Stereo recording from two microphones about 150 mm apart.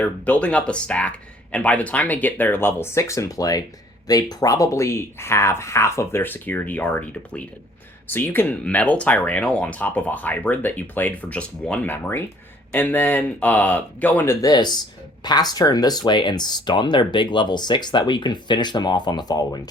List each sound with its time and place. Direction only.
0.0 s speech: 10° left (ahead or behind)
14.4 s speech: 30° left (ahead or behind)